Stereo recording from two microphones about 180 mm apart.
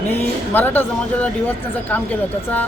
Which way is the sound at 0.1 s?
10° left (ahead or behind).